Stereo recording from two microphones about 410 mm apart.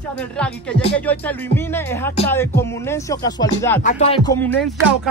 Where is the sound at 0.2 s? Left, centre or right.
Centre.